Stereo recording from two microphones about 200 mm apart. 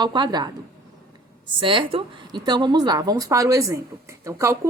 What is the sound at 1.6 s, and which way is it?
A woman's voice, 25° right (ahead or behind).